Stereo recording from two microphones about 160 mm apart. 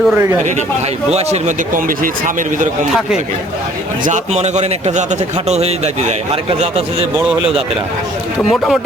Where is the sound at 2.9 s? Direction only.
5° right (ahead or behind).